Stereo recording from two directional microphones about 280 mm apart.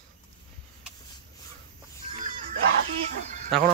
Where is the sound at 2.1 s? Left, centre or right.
Right.